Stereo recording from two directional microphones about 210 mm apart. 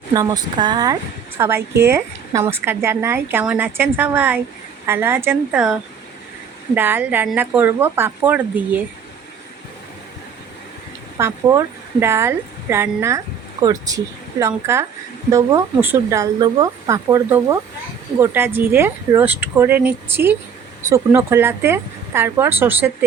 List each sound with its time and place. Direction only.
0.1 s a woman's voice: 20° right (ahead or behind)
6.7 s a woman's voice: 10° right (ahead or behind)
11.2 s a woman's voice: 15° right (ahead or behind)